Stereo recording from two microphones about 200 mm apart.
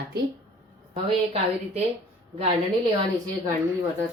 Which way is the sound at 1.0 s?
30° right (ahead or behind).